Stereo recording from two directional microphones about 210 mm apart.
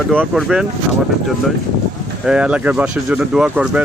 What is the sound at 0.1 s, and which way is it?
Speech, 5° right (ahead or behind).